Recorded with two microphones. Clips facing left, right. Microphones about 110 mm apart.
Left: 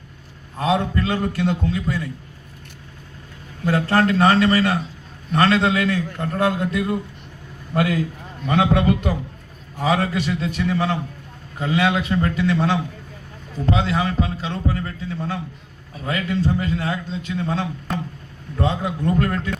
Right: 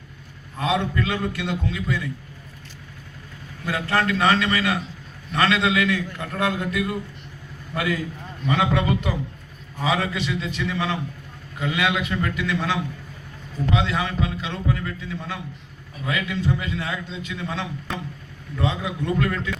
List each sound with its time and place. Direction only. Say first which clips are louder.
0.6 s a man's voice: left 3 dB; 35° left (ahead or behind)
3.7 s a man's voice: left 5 dB; 35° left (ahead or behind)
8.4 s a man's voice: left 4 dB; 45° left (ahead or behind)